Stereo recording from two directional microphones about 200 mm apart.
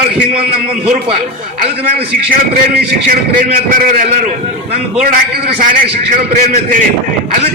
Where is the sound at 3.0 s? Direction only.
45° right (ahead or behind).